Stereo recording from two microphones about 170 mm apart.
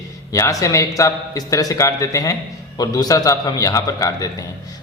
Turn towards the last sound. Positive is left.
turn(degrees=20)  # may be behind; listen again after turning